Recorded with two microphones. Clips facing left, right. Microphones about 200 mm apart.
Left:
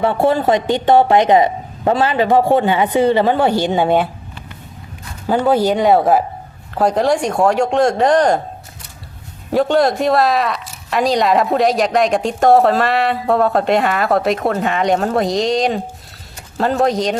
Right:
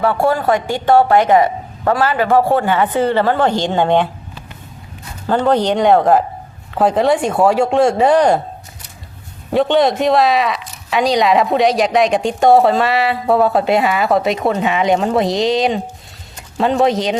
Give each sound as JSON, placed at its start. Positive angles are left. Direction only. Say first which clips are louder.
{"t": 0.0, "sound": "a man's voice", "louder": "left 1 dB", "side_deg": 25}
{"t": 5.3, "sound": "speech", "louder": "even", "side_deg": 10}
{"t": 9.5, "sound": "speech", "louder": "right 1 dB", "side_deg": 0}